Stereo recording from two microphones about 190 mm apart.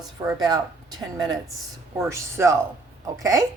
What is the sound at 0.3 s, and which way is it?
Speech, 20° right (ahead or behind).